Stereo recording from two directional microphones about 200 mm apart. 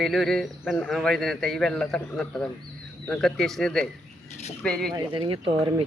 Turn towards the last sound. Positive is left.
turn(degrees=-25)  # may be behind; listen again after turning